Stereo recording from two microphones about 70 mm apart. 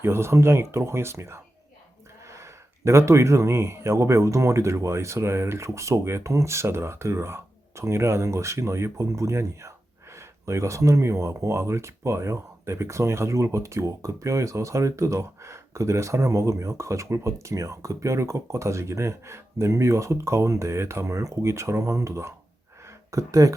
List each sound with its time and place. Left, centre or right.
0.0 s speech: right